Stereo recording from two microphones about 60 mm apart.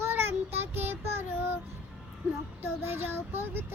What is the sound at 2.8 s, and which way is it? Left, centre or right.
Child singing, right.